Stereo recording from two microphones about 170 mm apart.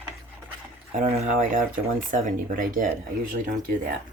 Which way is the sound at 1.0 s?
50° right (ahead or behind).